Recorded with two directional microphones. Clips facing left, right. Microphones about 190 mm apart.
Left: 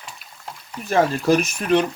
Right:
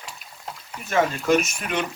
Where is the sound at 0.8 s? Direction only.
35° left (ahead or behind).